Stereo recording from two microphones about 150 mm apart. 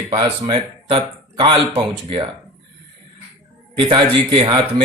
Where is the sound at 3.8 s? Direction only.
35° right (ahead or behind).